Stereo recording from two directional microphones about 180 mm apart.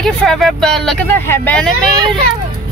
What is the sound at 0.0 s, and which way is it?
Speech, 5° left (ahead or behind).